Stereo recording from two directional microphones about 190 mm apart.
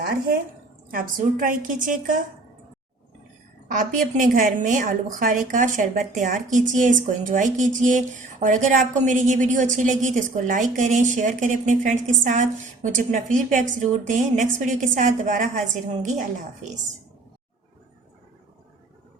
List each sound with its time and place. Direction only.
0.9 s a woman's voice: 45° right (ahead or behind)
3.7 s a woman's voice: 40° right (ahead or behind)